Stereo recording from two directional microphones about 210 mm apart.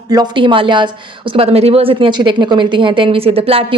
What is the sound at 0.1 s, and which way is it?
A woman's voice, 20° right (ahead or behind).